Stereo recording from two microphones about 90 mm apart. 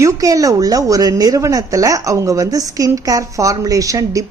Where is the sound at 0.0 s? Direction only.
40° right (ahead or behind).